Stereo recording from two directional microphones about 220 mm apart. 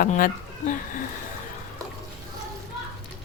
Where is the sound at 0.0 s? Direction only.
35° left (ahead or behind).